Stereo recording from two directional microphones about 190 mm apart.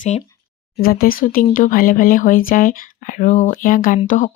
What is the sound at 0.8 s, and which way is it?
Speech, 50° left (ahead or behind).